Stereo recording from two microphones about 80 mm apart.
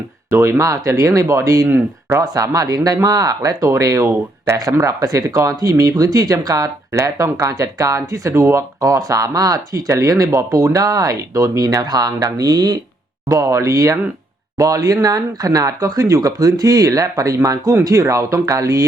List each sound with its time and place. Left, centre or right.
0.3 s speech: right
1.6 s speech: right
2.2 s speech: right
8.8 s speech: right